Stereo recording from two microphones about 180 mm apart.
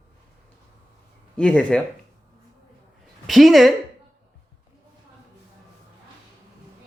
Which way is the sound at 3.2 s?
Centre (ahead or behind).